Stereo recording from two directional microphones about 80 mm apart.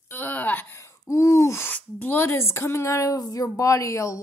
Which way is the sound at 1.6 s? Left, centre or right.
Left.